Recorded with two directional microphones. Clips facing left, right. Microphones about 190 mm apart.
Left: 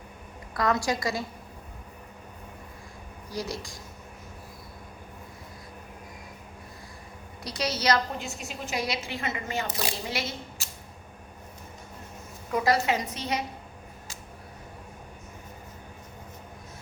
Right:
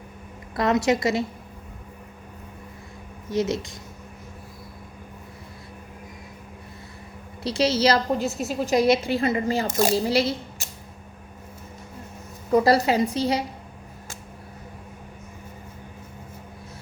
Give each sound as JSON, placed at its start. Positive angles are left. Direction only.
{"t": 0.5, "sound": "a woman's voice", "side_deg": -25}
{"t": 3.2, "sound": "a woman's voice", "side_deg": -25}
{"t": 7.4, "sound": "a woman's voice", "side_deg": -25}
{"t": 10.1, "sound": "speech", "side_deg": -35}
{"t": 12.5, "sound": "speech", "side_deg": -35}